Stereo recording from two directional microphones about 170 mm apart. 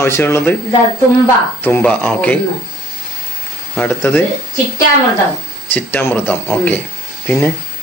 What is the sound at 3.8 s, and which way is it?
Speech, 10° left (ahead or behind).